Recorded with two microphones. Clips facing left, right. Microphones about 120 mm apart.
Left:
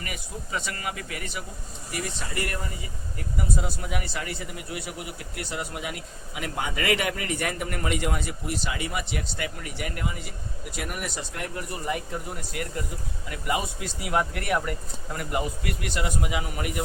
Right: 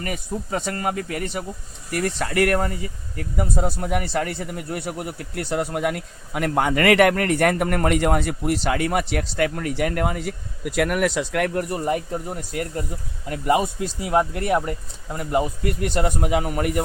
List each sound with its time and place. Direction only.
0.0 s speech: 45° right (ahead or behind)
1.9 s a man's voice: 60° right (ahead or behind)
11.7 s speech: 40° right (ahead or behind)